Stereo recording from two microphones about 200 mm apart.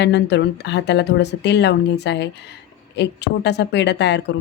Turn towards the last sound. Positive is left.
turn(degrees=60)  # may be behind; listen again after turning